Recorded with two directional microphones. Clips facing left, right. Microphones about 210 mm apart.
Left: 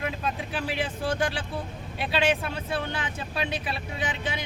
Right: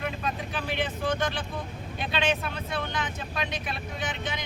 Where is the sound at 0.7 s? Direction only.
5° left (ahead or behind).